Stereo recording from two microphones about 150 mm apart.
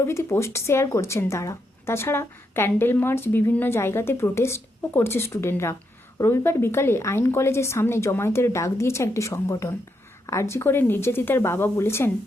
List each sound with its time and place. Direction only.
0.0 s speech: 20° left (ahead or behind)